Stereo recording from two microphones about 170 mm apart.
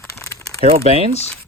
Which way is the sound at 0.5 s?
35° right (ahead or behind).